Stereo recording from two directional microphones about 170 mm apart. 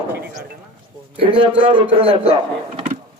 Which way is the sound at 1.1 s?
30° right (ahead or behind).